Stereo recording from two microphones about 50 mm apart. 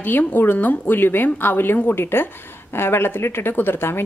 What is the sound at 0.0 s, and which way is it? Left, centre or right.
A woman's voice, left.